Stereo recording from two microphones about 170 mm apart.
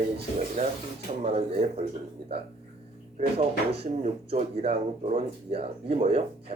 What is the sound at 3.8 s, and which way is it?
Speech, 35° right (ahead or behind).